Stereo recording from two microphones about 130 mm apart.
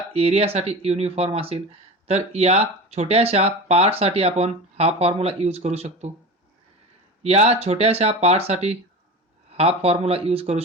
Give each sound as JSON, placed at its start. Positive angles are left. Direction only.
{"t": 0.1, "sound": "speech", "side_deg": -50}
{"t": 7.2, "sound": "speech", "side_deg": -55}